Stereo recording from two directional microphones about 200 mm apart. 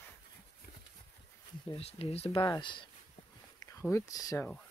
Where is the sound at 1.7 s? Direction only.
30° left (ahead or behind).